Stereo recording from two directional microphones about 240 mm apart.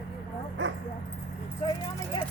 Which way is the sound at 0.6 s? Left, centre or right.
Right.